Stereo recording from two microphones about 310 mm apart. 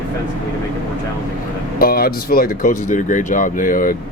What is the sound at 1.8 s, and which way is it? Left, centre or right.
Speech, left.